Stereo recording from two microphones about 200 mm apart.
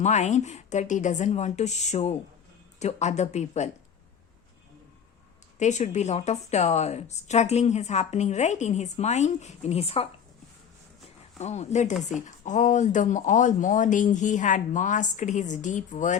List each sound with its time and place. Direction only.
0.0 s a woman's voice: 35° left (ahead or behind)
5.5 s a woman's voice: 35° left (ahead or behind)
11.3 s a woman's voice: 35° left (ahead or behind)